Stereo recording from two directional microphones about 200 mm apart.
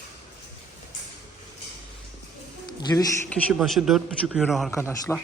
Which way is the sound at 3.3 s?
Centre (ahead or behind).